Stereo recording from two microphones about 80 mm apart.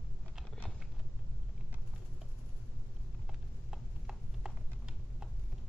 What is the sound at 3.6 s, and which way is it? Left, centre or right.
Clip-clop, centre.